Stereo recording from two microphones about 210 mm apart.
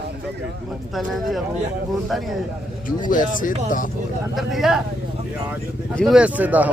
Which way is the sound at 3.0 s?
40° left (ahead or behind).